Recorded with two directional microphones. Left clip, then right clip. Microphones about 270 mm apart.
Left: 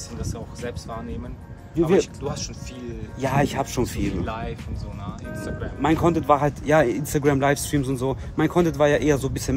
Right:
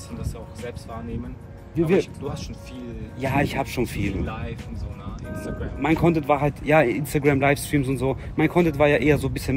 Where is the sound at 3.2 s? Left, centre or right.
Centre.